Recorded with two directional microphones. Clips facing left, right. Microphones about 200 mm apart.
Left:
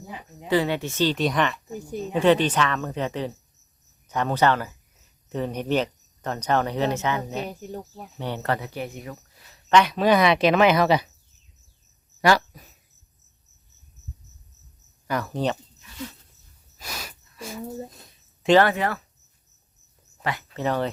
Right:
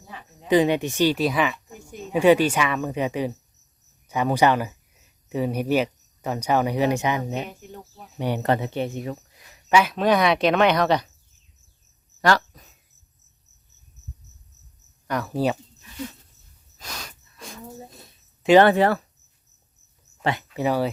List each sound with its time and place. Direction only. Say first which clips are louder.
0.1 s speech: even; 15° left (ahead or behind)
0.4 s speech: right 4 dB; 15° right (ahead or behind)
7.4 s speech: left 5 dB; 35° left (ahead or behind)
8.2 s speech: right 5 dB; 15° right (ahead or behind)
9.5 s speech: left 1 dB; 10° right (ahead or behind); by 11.1 s 5° left (ahead or behind)
12.2 s speech: left 1 dB; 10° left (ahead or behind)
15.0 s speech: right 2 dB; centre (ahead or behind)
16.7 s a sound: left 1 dB; 10° left (ahead or behind)
18.6 s speech: right 6 dB; 30° right (ahead or behind)
20.5 s speech: right 2 dB; 10° right (ahead or behind)